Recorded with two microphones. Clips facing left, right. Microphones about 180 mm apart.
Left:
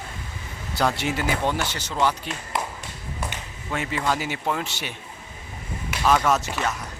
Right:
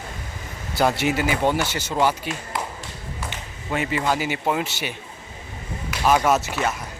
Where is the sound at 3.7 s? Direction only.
Centre (ahead or behind).